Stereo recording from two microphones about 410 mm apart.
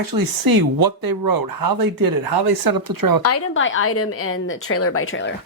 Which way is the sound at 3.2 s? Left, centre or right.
Left.